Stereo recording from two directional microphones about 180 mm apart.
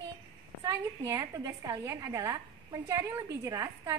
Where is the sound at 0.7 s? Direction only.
20° right (ahead or behind).